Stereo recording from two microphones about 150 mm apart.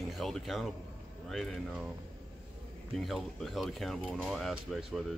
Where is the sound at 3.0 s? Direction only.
Centre (ahead or behind).